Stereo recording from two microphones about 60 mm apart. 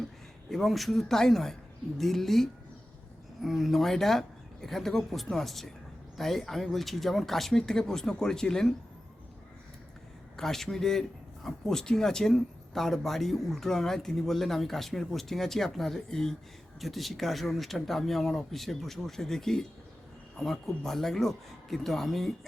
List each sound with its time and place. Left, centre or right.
0.5 s speech: centre
10.3 s speech: centre